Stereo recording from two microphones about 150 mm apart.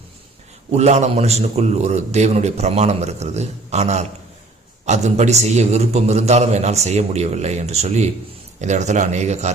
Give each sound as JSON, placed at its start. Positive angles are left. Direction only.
{"t": 0.7, "sound": "a man's voice", "side_deg": -50}